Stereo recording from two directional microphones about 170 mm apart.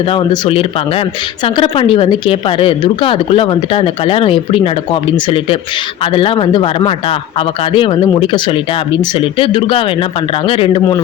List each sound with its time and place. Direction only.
0.1 s speech: 35° left (ahead or behind)